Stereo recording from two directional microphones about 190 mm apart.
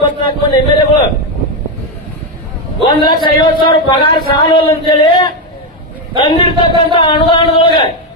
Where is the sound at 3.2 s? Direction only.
25° left (ahead or behind).